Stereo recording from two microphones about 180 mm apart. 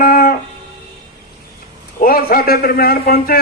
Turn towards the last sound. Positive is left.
turn(degrees=55)  # may be behind; listen again after turning